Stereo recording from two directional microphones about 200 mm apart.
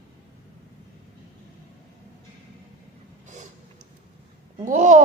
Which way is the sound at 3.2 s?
35° right (ahead or behind).